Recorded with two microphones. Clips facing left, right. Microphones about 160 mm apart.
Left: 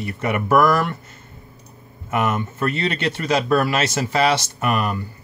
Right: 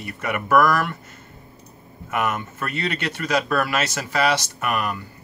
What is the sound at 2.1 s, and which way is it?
Speech, 25° left (ahead or behind).